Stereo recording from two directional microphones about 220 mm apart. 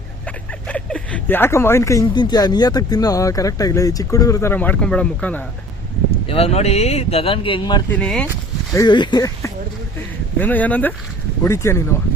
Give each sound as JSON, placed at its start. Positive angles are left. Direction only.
{"t": 0.3, "sound": "speech", "side_deg": 5}
{"t": 6.2, "sound": "speech", "side_deg": 25}
{"t": 7.9, "sound": "speech", "side_deg": 5}
{"t": 8.7, "sound": "speech", "side_deg": 20}